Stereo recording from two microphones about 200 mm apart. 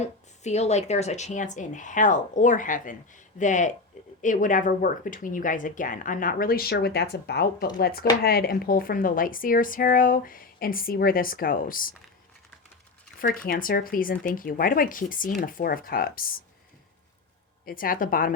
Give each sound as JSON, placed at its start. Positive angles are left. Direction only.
{"t": 0.0, "sound": "a woman's voice", "side_deg": 35}
{"t": 13.2, "sound": "a woman's voice", "side_deg": 45}
{"t": 17.7, "sound": "a woman's voice", "side_deg": 45}